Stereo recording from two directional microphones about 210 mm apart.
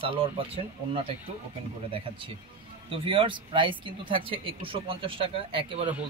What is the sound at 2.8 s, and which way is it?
Speech, 25° right (ahead or behind).